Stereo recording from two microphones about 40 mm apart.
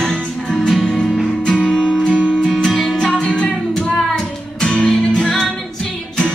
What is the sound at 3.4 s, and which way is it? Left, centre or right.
Music, centre.